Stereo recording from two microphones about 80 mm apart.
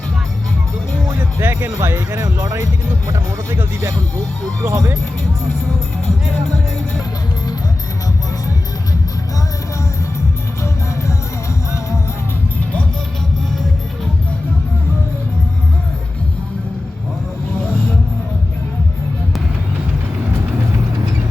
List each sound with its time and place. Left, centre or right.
1.2 s speech: right